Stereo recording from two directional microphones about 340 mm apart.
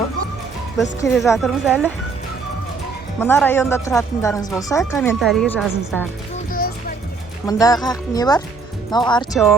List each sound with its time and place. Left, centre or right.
0.8 s speech: centre
3.2 s speech: centre
6.5 s music: left
7.4 s speech: centre
9.3 s speech: centre